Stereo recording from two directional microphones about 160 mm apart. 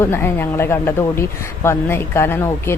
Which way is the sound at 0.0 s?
15° left (ahead or behind).